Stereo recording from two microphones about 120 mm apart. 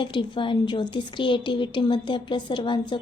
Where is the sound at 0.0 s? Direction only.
40° left (ahead or behind).